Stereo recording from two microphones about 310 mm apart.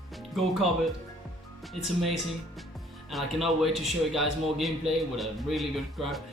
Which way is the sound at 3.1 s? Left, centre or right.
Centre.